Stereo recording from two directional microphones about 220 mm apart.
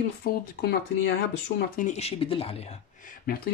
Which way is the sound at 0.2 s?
45° left (ahead or behind).